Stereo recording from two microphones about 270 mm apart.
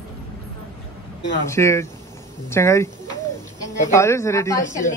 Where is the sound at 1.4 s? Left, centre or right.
Centre.